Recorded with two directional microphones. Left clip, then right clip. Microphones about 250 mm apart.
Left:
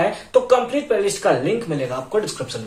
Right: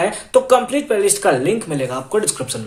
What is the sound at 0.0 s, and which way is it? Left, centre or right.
Speech, right.